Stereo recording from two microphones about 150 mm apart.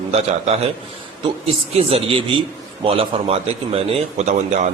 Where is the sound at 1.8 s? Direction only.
40° right (ahead or behind).